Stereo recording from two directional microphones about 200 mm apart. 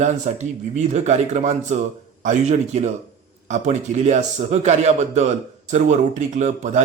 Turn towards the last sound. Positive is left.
turn(degrees=-40)  # may be behind; listen again after turning